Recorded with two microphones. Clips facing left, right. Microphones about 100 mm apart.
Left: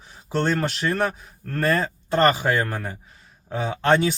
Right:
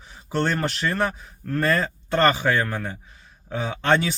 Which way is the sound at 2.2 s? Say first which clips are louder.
Even; 40° left (ahead or behind).